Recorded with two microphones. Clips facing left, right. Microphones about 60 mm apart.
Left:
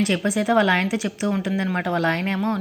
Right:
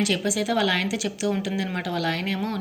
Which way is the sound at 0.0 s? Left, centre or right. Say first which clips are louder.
Left 3 dB; left.